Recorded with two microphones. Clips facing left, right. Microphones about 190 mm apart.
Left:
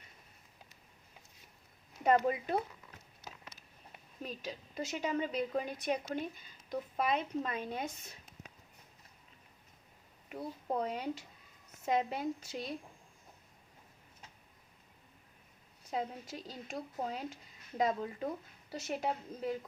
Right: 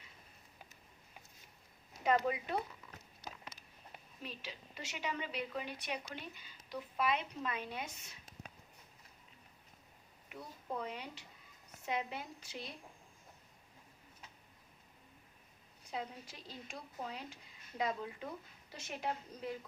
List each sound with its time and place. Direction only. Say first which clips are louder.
2.0 s a woman's voice: left 4 dB; 45° left (ahead or behind)
4.2 s a woman's voice: left 6 dB; 40° left (ahead or behind)
10.3 s a woman's voice: left 7 dB; 40° left (ahead or behind)
15.9 s a woman's voice: left 6 dB; 40° left (ahead or behind)